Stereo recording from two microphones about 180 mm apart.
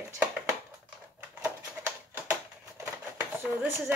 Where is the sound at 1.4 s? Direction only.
15° right (ahead or behind).